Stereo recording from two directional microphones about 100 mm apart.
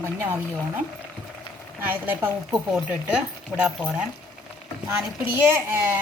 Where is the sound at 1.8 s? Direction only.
20° right (ahead or behind).